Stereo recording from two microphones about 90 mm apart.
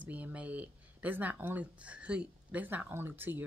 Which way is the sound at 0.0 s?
15° right (ahead or behind).